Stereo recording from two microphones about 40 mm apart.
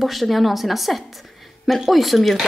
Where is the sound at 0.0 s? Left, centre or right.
Centre.